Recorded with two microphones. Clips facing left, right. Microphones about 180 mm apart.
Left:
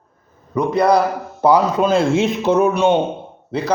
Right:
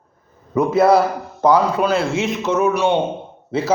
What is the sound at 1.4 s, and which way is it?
Speech, 10° left (ahead or behind).